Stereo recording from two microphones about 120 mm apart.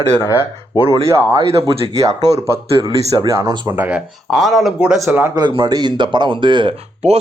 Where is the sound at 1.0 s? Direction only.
25° right (ahead or behind).